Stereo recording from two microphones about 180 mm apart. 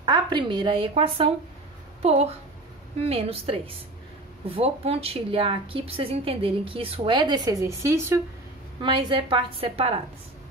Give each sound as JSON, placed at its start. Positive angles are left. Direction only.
{"t": 0.0, "sound": "a woman's voice", "side_deg": -25}
{"t": 8.8, "sound": "a woman's voice", "side_deg": -30}